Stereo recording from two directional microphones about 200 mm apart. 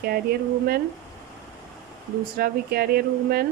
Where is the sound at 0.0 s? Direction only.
50° right (ahead or behind).